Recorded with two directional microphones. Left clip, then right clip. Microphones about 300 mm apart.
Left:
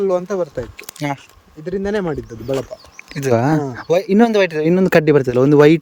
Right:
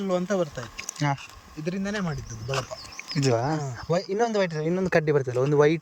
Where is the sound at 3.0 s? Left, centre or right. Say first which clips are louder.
Left 4 dB; left.